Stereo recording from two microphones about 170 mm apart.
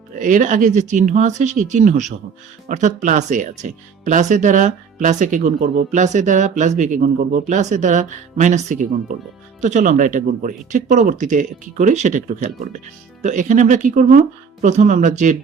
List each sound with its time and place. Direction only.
0.2 s speech: 50° right (ahead or behind)